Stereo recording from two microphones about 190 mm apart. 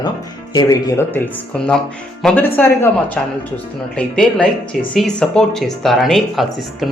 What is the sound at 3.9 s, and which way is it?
Speech, 5° left (ahead or behind).